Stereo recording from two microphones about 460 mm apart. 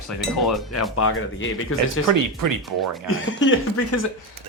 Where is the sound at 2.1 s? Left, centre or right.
Right.